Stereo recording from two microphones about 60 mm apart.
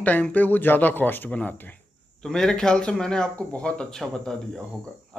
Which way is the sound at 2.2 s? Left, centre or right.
Centre.